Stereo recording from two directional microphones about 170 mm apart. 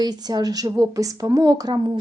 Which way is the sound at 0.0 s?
25° right (ahead or behind).